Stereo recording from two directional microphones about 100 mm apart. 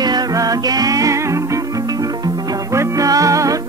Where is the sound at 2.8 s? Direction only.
35° right (ahead or behind).